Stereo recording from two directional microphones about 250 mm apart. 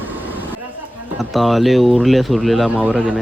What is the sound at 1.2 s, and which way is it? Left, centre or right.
Speech, centre.